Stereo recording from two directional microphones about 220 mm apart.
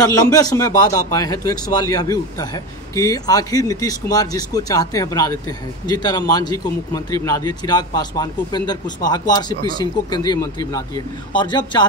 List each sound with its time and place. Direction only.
0.0 s a man's voice: 15° left (ahead or behind)